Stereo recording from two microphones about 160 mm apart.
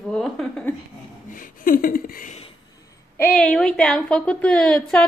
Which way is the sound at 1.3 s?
60° left (ahead or behind).